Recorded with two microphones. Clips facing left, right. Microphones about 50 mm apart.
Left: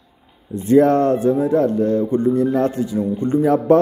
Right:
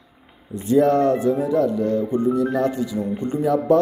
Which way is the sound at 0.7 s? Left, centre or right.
Left.